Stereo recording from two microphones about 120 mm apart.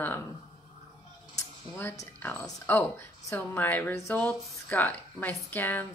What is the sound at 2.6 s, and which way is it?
Speech, 20° left (ahead or behind).